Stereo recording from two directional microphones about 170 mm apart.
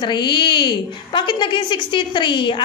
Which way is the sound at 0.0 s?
25° left (ahead or behind).